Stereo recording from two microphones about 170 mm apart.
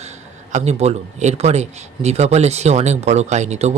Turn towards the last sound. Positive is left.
turn(degrees=-40)  # may be behind; listen again after turning